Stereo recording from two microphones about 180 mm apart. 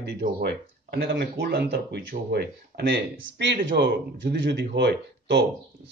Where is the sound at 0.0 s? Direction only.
65° right (ahead or behind).